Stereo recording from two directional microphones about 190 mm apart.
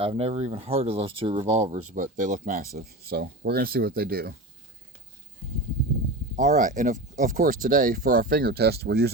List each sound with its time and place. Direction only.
0.0 s speech: 30° right (ahead or behind)
1.6 s speech: 40° right (ahead or behind)
6.3 s speech: 45° right (ahead or behind)